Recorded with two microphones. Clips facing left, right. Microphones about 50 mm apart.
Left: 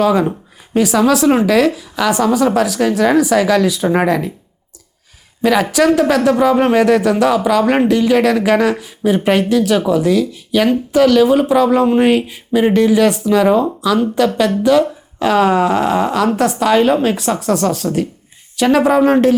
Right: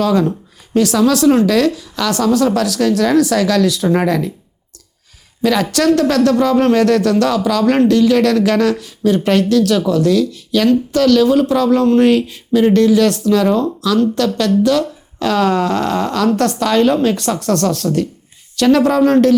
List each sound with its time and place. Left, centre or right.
0.0 s speech: centre
5.4 s speech: centre